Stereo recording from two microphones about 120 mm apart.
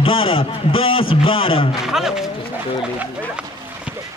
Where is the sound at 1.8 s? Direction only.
5° right (ahead or behind).